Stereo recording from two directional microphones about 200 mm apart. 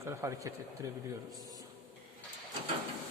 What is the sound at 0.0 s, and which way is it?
Speech, 15° right (ahead or behind).